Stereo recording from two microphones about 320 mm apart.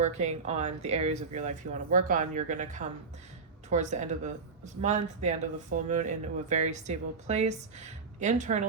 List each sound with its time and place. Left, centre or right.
0.0 s speech: right